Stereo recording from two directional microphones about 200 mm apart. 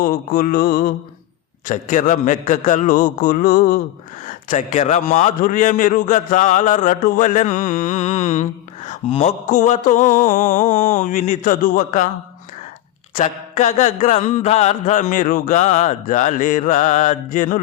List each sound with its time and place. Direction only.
0.0 s mantra: 45° left (ahead or behind)
1.6 s a man's voice: 40° left (ahead or behind)
13.1 s a man's voice: 35° left (ahead or behind)